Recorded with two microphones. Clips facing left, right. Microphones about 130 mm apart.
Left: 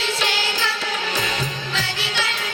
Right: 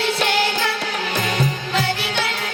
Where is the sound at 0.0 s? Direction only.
55° right (ahead or behind).